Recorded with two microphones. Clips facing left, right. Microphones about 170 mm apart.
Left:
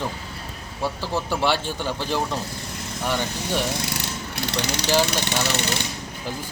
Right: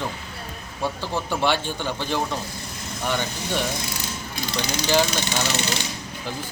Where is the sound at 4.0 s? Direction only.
70° left (ahead or behind).